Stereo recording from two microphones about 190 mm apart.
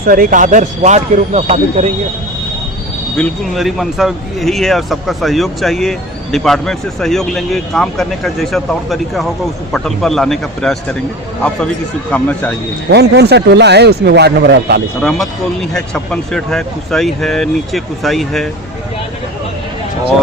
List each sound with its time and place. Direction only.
0.0 s speech: 45° right (ahead or behind)
3.2 s speech: centre (ahead or behind)
12.1 s speech: 10° left (ahead or behind)
12.9 s speech: 60° right (ahead or behind)
16.3 s speech: centre (ahead or behind)